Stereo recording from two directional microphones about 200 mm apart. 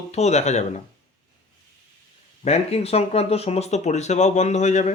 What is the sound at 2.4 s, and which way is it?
Speech, 30° left (ahead or behind).